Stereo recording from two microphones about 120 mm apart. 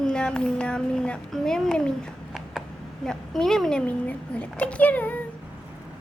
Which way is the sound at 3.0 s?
5° left (ahead or behind).